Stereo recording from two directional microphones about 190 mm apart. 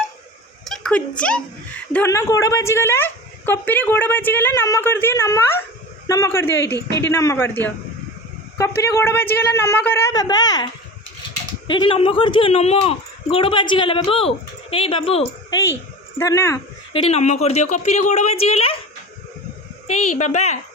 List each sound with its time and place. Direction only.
0.6 s a woman's voice: centre (ahead or behind); by 10.7 s 20° left (ahead or behind)
11.7 s speech: 25° left (ahead or behind)
16.1 s a woman's voice: 15° left (ahead or behind)
17.1 s speech: 35° left (ahead or behind)
20.1 s speech: 35° left (ahead or behind)